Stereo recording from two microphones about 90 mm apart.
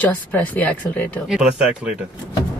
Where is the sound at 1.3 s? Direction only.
10° right (ahead or behind).